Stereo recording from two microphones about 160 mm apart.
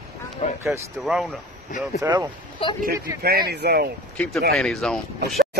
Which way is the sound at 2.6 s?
35° left (ahead or behind).